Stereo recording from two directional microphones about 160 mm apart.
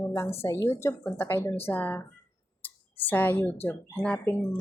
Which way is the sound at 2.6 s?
10° left (ahead or behind).